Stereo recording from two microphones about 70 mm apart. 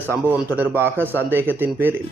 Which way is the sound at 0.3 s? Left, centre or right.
Right.